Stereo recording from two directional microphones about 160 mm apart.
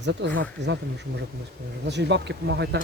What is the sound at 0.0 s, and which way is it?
Speech, 90° right.